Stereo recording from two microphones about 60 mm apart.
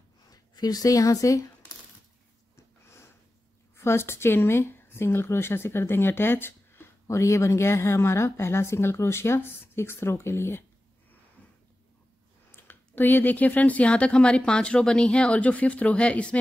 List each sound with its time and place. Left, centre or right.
0.3 s speech: left
2.5 s a sound: left
3.7 s speech: left
7.1 s a woman's voice: left
12.4 s speech: left; by 16.3 s centre